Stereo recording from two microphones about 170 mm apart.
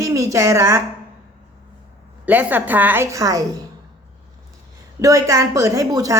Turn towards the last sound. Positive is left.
turn(degrees=-20)  # may be behind; listen again after turning